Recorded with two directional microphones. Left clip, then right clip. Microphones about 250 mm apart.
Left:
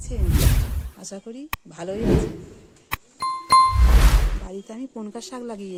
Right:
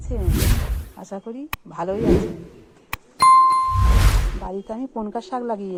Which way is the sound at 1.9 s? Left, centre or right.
Centre.